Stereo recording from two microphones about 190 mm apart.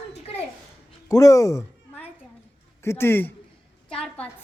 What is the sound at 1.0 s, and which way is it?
Speech, 15° left (ahead or behind).